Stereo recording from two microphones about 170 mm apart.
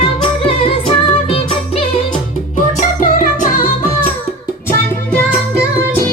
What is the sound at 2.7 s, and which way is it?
Music, 45° left (ahead or behind).